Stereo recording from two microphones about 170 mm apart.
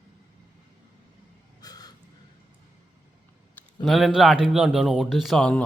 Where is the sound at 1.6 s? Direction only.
20° left (ahead or behind).